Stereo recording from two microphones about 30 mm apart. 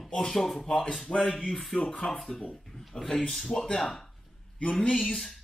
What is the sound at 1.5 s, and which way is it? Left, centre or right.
Speech, centre.